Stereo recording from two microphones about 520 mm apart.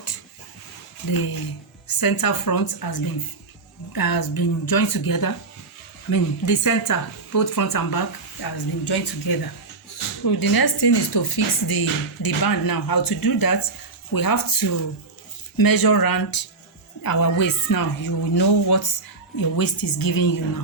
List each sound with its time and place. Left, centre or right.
2.0 s speech: left